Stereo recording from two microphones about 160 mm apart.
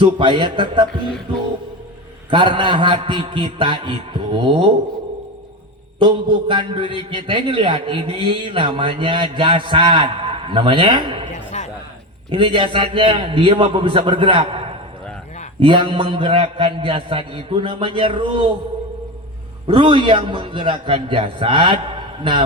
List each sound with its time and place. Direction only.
0.0 s a man's voice: 30° right (ahead or behind)
2.3 s a man's voice: 30° right (ahead or behind)
6.0 s a man's voice: 30° right (ahead or behind)
11.5 s a sound: 50° left (ahead or behind)
12.3 s a man's voice: 30° right (ahead or behind)
19.6 s a man's voice: 35° right (ahead or behind)